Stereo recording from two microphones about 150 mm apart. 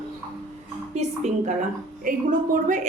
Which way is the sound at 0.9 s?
50° right (ahead or behind).